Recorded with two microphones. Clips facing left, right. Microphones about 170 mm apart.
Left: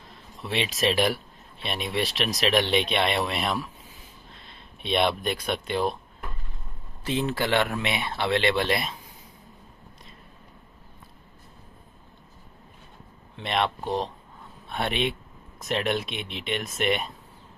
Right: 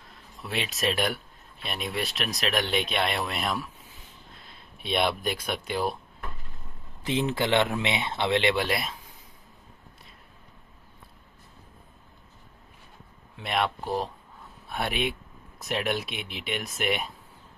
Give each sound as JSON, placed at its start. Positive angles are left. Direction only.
{"t": 0.4, "sound": "speech", "side_deg": 0}
{"t": 7.1, "sound": "speech", "side_deg": -20}
{"t": 13.4, "sound": "speech", "side_deg": -5}
{"t": 14.7, "sound": "speech", "side_deg": 0}